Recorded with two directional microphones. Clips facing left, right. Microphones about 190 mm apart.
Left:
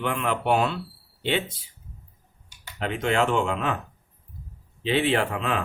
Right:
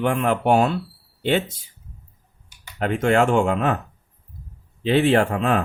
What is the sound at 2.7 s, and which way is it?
Speech, 45° right (ahead or behind).